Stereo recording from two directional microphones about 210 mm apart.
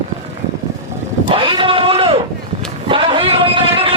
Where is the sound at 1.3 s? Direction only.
25° right (ahead or behind).